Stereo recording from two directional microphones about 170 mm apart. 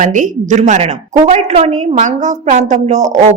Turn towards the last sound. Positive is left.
turn(degrees=-45)  # may be behind; listen again after turning